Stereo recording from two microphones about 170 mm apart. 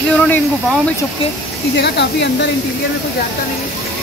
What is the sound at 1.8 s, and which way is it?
Speech, 90° left.